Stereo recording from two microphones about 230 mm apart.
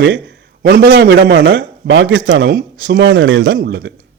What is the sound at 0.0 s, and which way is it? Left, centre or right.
A man's voice, right.